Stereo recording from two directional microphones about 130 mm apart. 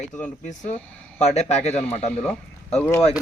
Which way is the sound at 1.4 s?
55° left (ahead or behind).